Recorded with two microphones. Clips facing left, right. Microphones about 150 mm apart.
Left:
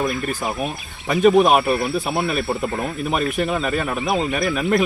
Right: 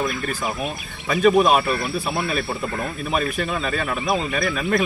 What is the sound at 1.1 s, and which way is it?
A man's voice, 20° left (ahead or behind).